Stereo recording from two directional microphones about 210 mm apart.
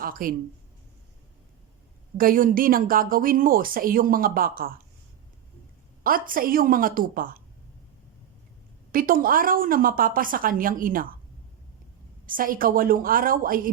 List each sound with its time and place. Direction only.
0.0 s speech: 45° right (ahead or behind)
2.1 s speech: 40° right (ahead or behind)
6.0 s speech: 40° right (ahead or behind)
8.9 s speech: 40° right (ahead or behind)
12.2 s a woman's voice: 40° right (ahead or behind)